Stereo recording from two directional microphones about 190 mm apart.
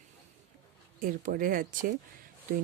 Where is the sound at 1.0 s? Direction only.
50° right (ahead or behind).